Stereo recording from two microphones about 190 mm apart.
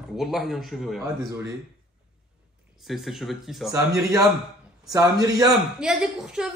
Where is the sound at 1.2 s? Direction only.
15° right (ahead or behind).